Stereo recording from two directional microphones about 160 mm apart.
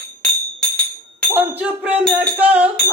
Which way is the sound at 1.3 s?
10° right (ahead or behind).